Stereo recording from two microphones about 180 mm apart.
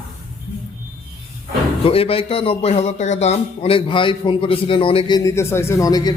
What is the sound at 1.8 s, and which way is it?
A man's voice, 30° left (ahead or behind).